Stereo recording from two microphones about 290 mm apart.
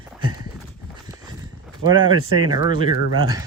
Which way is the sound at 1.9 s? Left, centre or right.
Centre.